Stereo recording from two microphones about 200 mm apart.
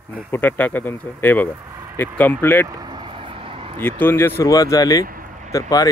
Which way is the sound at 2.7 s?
20° right (ahead or behind).